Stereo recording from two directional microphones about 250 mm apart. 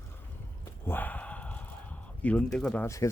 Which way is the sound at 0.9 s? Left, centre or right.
Centre.